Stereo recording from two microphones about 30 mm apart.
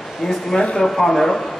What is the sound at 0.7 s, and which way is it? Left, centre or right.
Speech, centre.